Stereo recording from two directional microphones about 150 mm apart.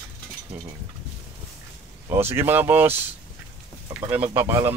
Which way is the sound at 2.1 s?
15° right (ahead or behind).